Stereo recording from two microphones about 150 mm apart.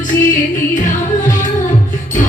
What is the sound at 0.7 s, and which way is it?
Music, 60° left (ahead or behind).